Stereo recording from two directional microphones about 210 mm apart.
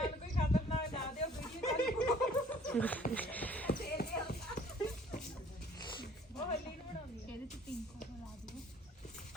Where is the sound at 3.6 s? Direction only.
50° left (ahead or behind).